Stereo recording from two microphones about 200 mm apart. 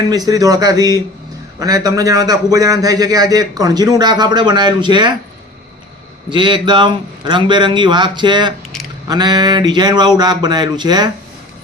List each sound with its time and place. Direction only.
0.1 s a man's voice: 20° right (ahead or behind)
6.3 s a man's voice: 25° right (ahead or behind)